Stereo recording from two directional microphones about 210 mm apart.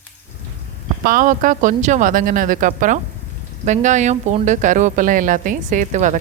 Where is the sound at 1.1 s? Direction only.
40° right (ahead or behind).